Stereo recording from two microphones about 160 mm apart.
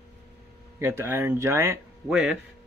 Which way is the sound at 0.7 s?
15° right (ahead or behind).